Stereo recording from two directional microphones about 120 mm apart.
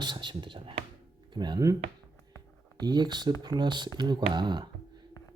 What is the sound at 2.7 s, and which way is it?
Speech, 35° right (ahead or behind).